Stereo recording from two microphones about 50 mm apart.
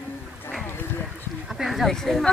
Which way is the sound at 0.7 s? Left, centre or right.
Left.